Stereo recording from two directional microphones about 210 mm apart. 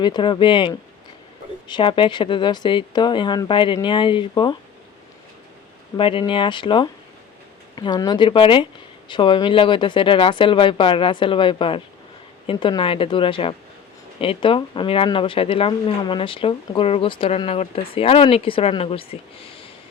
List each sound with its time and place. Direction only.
0.0 s speech: 20° left (ahead or behind)
6.0 s speech: 25° left (ahead or behind)